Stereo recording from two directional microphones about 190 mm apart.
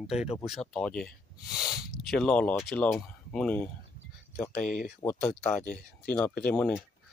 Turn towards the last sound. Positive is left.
turn(degrees=5)  # may be behind; listen again after turning